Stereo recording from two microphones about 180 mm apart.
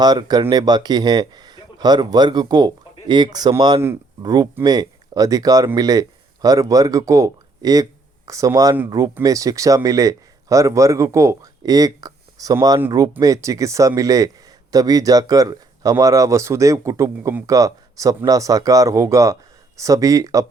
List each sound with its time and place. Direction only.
0.0 s speech: 25° right (ahead or behind)